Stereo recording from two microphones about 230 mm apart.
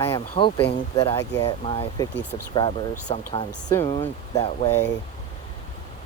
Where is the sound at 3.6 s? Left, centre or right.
Centre.